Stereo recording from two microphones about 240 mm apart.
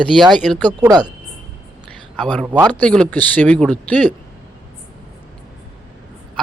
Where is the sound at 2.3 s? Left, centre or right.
Centre.